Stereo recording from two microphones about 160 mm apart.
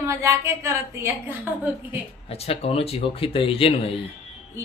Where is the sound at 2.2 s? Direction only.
40° left (ahead or behind).